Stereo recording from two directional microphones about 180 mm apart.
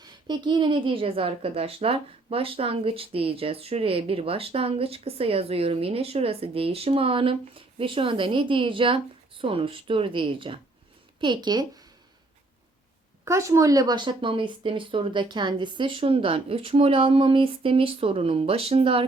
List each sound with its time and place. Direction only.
0.0 s a woman's voice: 25° right (ahead or behind)
13.2 s a woman's voice: 15° right (ahead or behind)